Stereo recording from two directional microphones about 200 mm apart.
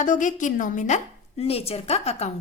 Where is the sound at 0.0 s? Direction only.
40° left (ahead or behind).